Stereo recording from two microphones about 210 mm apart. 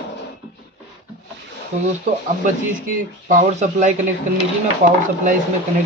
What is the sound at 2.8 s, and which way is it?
A man's voice, 40° right (ahead or behind).